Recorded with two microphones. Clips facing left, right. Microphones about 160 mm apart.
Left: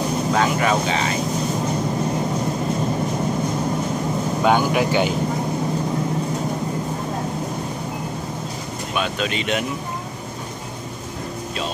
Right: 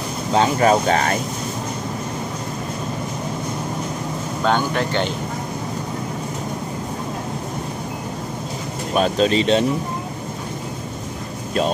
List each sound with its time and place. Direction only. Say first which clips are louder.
0.3 s speech: right 5 dB; 30° right (ahead or behind); by 1.1 s 50° right (ahead or behind)
4.4 s speech: left 2 dB; 10° left (ahead or behind)
8.9 s speech: right 7 dB; 35° right (ahead or behind)